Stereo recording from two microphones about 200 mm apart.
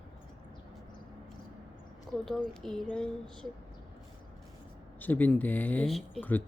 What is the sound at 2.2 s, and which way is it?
Speech, centre (ahead or behind).